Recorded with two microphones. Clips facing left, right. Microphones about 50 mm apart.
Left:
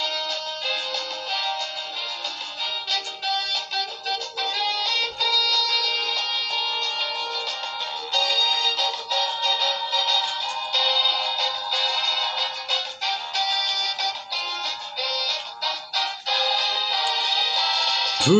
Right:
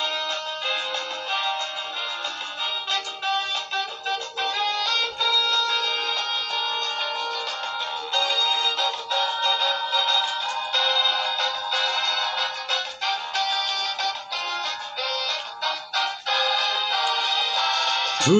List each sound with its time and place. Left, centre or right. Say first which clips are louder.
0.0 s music: right 1 dB; right
2.9 s music: right 1 dB; right